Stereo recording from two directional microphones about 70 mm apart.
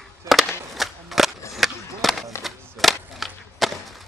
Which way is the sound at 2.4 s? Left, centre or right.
Centre.